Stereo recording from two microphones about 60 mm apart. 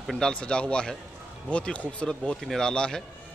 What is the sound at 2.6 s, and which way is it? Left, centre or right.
Speech, centre.